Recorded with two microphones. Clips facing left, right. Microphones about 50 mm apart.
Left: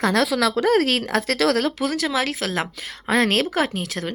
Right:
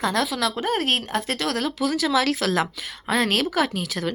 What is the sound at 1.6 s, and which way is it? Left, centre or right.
Speech, left.